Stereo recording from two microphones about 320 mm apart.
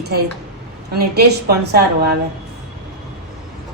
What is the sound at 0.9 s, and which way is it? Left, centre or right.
A woman's voice, right.